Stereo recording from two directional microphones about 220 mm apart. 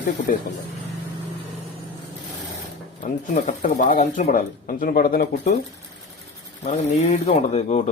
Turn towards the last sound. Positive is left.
turn(degrees=30)  # may be behind; listen again after turning